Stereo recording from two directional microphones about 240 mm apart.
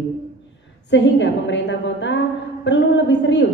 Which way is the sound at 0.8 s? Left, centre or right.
Left.